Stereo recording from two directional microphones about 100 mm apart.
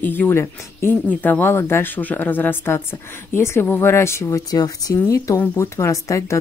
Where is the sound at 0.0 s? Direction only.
20° left (ahead or behind).